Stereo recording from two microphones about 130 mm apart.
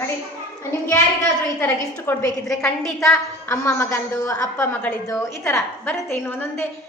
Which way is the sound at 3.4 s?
20° left (ahead or behind).